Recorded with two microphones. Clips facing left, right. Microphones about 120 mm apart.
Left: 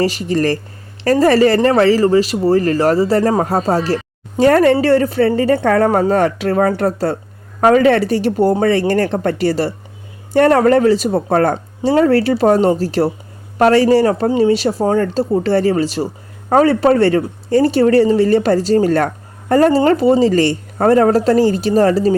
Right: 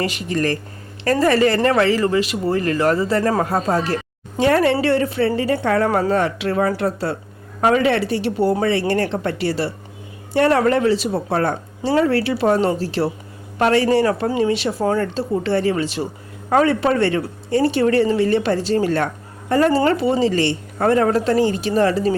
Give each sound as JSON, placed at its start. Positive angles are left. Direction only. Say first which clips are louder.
{"t": 0.0, "sound": "a woman's voice", "louder": "left 5 dB", "side_deg": 35}